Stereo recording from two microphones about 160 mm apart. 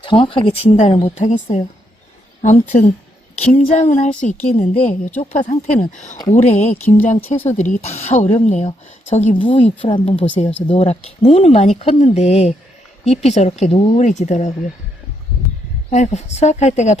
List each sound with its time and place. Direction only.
0.0 s speech: 30° left (ahead or behind)
5.3 s speech: 55° left (ahead or behind)
9.3 s speech: 30° left (ahead or behind); by 14.5 s 45° left (ahead or behind)
15.9 s speech: 45° left (ahead or behind)